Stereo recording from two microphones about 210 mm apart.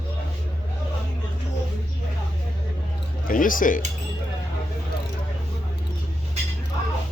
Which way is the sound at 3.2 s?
40° left (ahead or behind).